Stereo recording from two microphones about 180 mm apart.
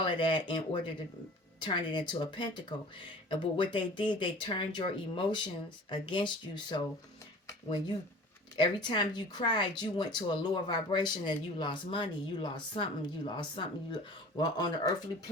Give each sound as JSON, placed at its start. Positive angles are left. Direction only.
{"t": 0.0, "sound": "speech", "side_deg": 25}